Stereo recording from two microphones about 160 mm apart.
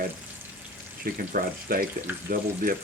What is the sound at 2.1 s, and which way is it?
Speech, 15° right (ahead or behind).